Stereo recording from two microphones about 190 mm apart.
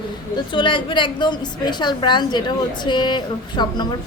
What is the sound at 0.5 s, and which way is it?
A woman's voice, 25° left (ahead or behind).